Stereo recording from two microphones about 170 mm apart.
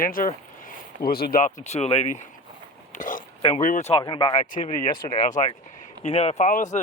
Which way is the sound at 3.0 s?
50° left (ahead or behind).